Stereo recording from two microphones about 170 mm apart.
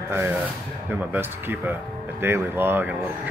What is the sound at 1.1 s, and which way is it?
Speech, 10° right (ahead or behind).